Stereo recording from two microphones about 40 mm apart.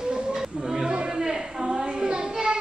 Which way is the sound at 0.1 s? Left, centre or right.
Centre.